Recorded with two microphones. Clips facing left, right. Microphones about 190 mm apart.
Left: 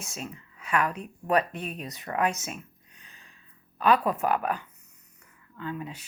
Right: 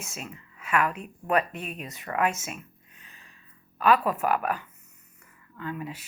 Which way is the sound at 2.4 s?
35° left (ahead or behind).